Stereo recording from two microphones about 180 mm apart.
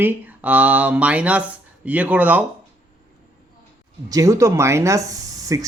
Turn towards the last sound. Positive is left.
turn(degrees=-20)  # may be behind; listen again after turning